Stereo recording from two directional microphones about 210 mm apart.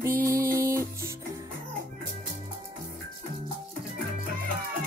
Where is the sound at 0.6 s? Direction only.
15° right (ahead or behind).